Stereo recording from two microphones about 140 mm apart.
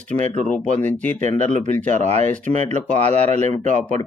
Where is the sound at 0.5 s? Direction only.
10° left (ahead or behind).